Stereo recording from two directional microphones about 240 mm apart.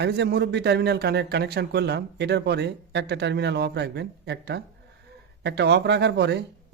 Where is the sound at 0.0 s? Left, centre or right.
Right.